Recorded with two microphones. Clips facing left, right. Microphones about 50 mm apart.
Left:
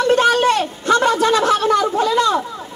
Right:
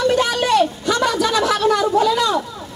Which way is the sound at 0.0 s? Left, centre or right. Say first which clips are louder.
Left 4 dB; left.